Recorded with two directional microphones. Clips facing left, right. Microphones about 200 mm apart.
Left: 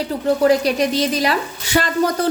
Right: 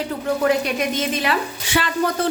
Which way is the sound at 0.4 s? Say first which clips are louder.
Left 4 dB; 35° left (ahead or behind).